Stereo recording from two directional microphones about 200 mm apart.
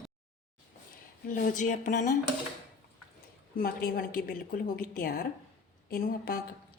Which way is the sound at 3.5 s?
50° left (ahead or behind).